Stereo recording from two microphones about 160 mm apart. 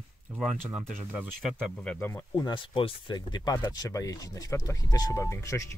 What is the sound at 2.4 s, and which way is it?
Speech, 30° left (ahead or behind).